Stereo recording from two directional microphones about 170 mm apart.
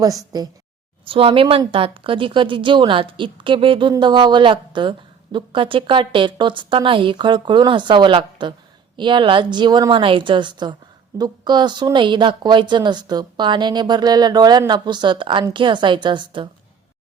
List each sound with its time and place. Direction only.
0.0 s speech: 20° right (ahead or behind)
1.0 s speech: 30° right (ahead or behind)